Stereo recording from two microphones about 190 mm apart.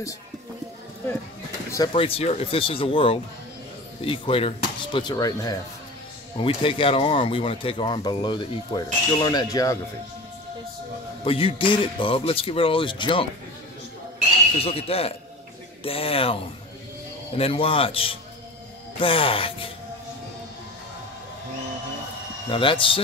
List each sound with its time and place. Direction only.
1.7 s speech: 20° left (ahead or behind)
11.2 s speech: 30° left (ahead or behind)
14.6 s a man's voice: 30° left (ahead or behind)
17.4 s speech: 30° left (ahead or behind)
22.5 s speech: 25° left (ahead or behind)